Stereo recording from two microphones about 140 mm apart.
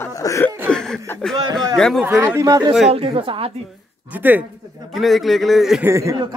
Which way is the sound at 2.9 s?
40° right (ahead or behind).